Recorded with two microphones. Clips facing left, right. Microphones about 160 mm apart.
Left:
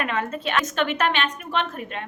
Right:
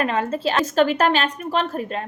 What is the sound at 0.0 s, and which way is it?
A woman's voice, 35° right (ahead or behind).